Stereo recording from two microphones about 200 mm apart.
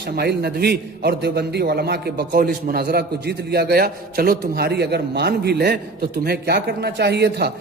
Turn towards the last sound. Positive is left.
turn(degrees=-55)  # may be behind; listen again after turning